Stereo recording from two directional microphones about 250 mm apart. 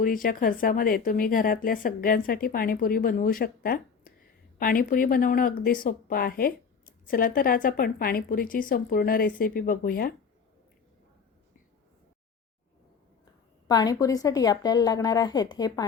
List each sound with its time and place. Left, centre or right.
0.0 s speech: left
13.7 s a woman's voice: centre